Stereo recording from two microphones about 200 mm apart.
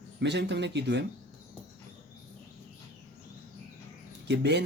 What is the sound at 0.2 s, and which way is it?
Speech, 60° right (ahead or behind).